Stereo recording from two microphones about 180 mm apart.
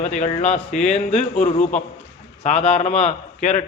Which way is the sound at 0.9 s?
35° left (ahead or behind).